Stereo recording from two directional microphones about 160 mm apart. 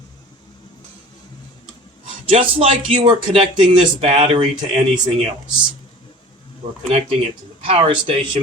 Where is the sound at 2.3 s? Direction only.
35° right (ahead or behind).